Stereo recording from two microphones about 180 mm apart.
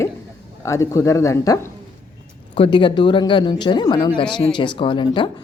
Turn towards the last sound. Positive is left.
turn(degrees=25)  # may be behind; listen again after turning